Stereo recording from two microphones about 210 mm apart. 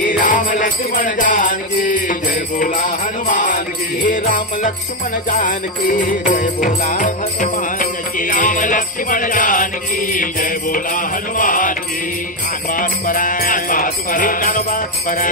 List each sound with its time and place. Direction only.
0.0 s music: 40° left (ahead or behind)
12.7 s music: 40° left (ahead or behind)